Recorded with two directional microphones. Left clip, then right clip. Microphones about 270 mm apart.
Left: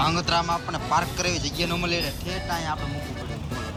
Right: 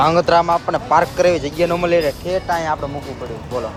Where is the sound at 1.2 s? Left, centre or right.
Centre.